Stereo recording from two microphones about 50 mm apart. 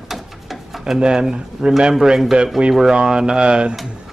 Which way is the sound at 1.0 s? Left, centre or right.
Centre.